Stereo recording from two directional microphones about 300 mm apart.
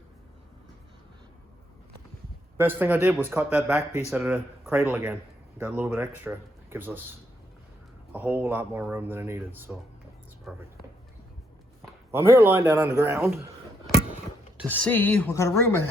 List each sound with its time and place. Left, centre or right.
2.6 s speech: centre
8.1 s speech: centre
12.1 s speech: centre
14.7 s speech: centre